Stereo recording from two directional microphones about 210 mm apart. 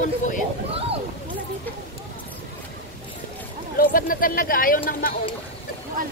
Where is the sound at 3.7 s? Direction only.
45° left (ahead or behind).